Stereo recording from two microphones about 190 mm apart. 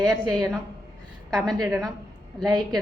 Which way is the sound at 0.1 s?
Centre (ahead or behind).